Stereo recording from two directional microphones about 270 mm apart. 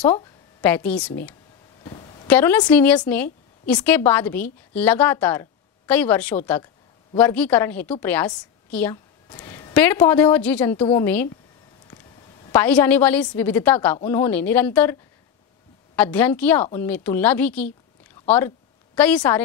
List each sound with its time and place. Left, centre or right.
0.1 s speech: centre
1.9 s a sound: left
2.2 s speech: centre
9.3 s a sound: centre
9.8 s speech: centre
12.4 s speech: centre
16.0 s a woman's voice: centre
18.9 s a woman's voice: centre